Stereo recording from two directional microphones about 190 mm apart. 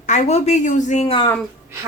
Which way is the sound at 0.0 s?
40° left (ahead or behind).